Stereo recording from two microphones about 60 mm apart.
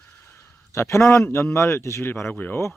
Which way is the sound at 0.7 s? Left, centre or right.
Left.